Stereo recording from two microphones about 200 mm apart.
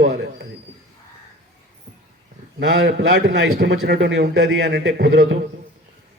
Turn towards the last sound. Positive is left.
turn(degrees=-65)  # may be behind; listen again after turning